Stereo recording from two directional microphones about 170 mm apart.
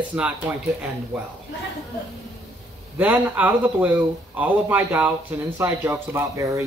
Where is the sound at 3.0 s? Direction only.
10° right (ahead or behind).